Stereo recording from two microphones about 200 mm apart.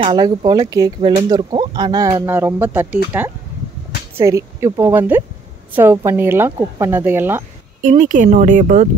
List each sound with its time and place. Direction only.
0.0 s speech: 25° right (ahead or behind)
7.8 s speech: 40° right (ahead or behind)